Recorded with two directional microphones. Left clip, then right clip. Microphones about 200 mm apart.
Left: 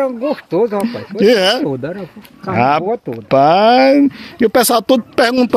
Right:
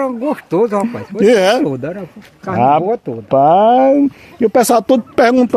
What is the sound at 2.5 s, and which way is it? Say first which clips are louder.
Speech: right 2 dB; centre (ahead or behind).